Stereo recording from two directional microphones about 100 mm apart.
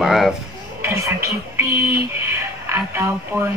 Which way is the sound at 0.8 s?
25° right (ahead or behind).